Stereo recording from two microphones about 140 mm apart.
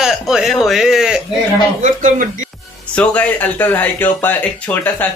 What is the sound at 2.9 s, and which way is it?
Speech, 10° left (ahead or behind).